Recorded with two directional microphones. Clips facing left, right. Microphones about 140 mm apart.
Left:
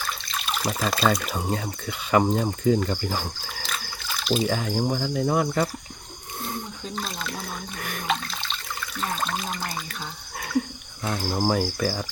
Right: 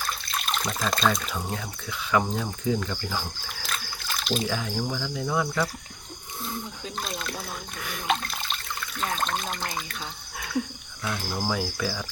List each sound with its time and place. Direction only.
0.3 s water: centre (ahead or behind)
1.5 s speech: 60° left (ahead or behind)
4.1 s a sound: centre (ahead or behind)
4.4 s speech: 50° left (ahead or behind)
6.8 s speech: centre (ahead or behind)
7.8 s speech: 50° left (ahead or behind)
8.0 s water: centre (ahead or behind)
9.0 s speech: centre (ahead or behind)
11.0 s cricket: 40° left (ahead or behind)